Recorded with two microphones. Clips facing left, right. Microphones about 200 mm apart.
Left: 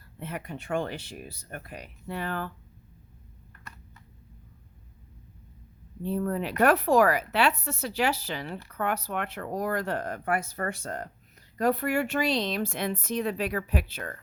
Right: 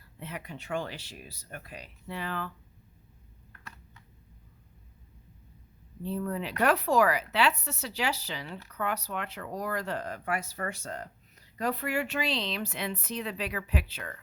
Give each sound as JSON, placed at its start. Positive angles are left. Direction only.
{"t": 0.2, "sound": "speech", "side_deg": 50}
{"t": 6.0, "sound": "speech", "side_deg": 50}